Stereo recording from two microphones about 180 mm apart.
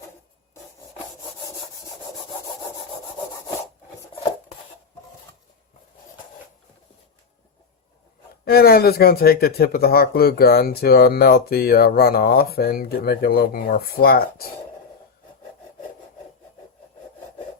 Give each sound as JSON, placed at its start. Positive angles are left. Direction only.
{"t": 8.4, "sound": "speech", "side_deg": 60}